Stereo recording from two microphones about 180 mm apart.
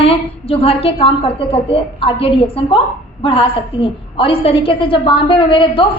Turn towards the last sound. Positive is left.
turn(degrees=30)  # may be behind; listen again after turning